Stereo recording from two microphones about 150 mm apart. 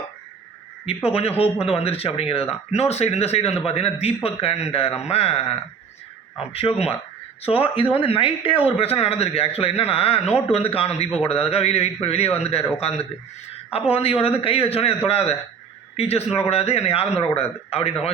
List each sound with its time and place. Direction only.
0.9 s a man's voice: 40° left (ahead or behind)
6.5 s speech: 40° left (ahead or behind)
13.7 s a man's voice: 40° left (ahead or behind)